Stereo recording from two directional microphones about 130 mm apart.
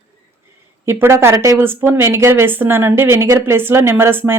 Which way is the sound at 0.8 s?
20° right (ahead or behind).